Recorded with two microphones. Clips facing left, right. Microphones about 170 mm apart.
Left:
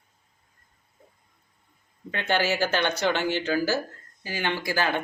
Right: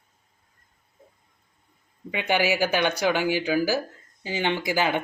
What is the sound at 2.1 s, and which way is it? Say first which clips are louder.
Speech: right 2 dB; 15° right (ahead or behind).